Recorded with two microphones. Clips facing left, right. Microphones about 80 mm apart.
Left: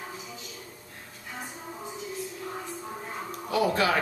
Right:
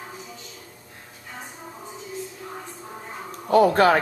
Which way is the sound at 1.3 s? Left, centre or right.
Centre.